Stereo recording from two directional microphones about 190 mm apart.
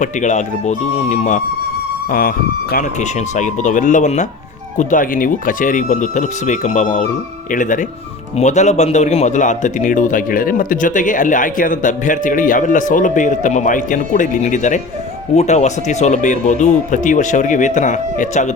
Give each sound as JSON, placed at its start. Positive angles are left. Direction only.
{"t": 0.0, "sound": "speech", "side_deg": 40}
{"t": 2.0, "sound": "a man's voice", "side_deg": 50}